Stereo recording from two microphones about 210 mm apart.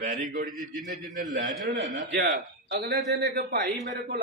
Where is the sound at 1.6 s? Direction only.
45° right (ahead or behind).